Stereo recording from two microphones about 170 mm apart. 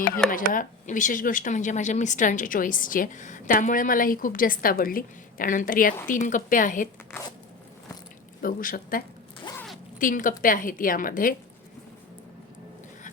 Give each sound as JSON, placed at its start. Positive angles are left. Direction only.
{"t": 0.3, "sound": "speech", "side_deg": 55}
{"t": 8.4, "sound": "speech", "side_deg": 55}